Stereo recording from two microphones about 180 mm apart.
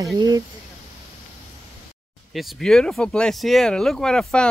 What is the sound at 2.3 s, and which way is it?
Speech, centre (ahead or behind).